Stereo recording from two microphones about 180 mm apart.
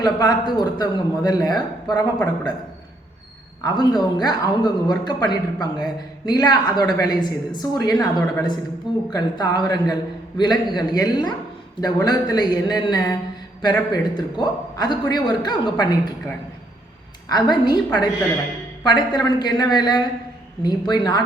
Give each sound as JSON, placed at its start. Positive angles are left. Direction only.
{"t": 0.0, "sound": "speech", "side_deg": 25}
{"t": 2.1, "sound": "a man's voice", "side_deg": 10}
{"t": 3.6, "sound": "speech", "side_deg": 25}
{"t": 17.2, "sound": "speech", "side_deg": 20}